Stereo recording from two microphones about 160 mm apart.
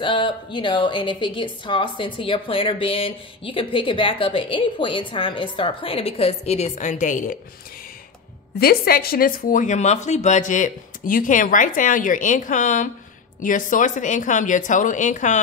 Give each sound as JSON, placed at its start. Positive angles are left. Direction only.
{"t": 0.0, "sound": "a woman's voice", "side_deg": 30}
{"t": 8.5, "sound": "speech", "side_deg": 70}